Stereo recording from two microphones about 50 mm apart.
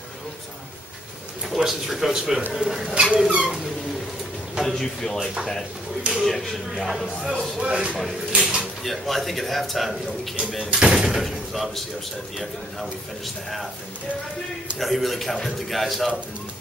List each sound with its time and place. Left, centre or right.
1.5 s speech: centre
3.1 s rodents: right
4.6 s a man's voice: centre
7.1 s speech: centre
7.6 s rodents: right
8.3 s speech: centre
8.8 s a man's voice: centre
10.7 s speech: centre
14.8 s a man's voice: centre